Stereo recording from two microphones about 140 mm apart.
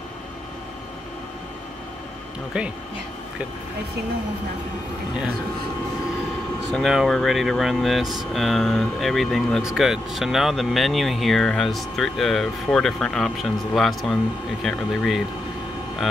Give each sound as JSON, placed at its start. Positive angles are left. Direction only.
{"t": 2.5, "sound": "speech", "side_deg": -5}
{"t": 6.7, "sound": "speech", "side_deg": 0}